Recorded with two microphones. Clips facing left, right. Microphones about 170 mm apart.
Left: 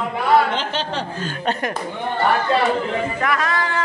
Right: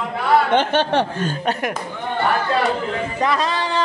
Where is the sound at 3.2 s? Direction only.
30° right (ahead or behind).